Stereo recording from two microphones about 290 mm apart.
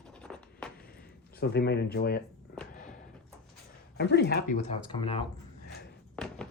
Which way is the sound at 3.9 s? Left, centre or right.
Left.